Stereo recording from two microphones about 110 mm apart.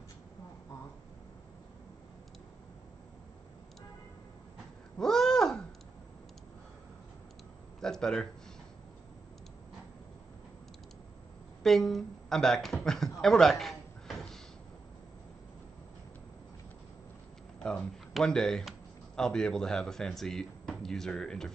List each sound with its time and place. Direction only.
4.9 s a sound: 5° left (ahead or behind)
7.8 s speech: 5° left (ahead or behind)
11.6 s speech: 5° left (ahead or behind)
18.1 s speech: 5° left (ahead or behind)